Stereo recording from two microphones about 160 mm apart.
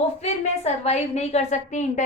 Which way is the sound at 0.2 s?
45° left (ahead or behind).